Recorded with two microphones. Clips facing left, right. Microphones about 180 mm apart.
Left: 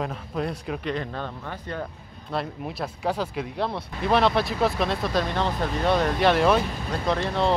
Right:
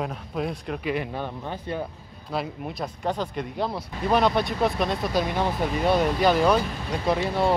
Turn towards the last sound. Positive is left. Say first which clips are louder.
# right 1 dB
turn(degrees=-5)  # may be behind; listen again after turning